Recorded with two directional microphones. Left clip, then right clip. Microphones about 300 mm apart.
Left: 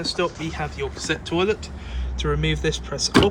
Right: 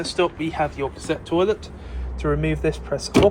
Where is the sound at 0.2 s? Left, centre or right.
Centre.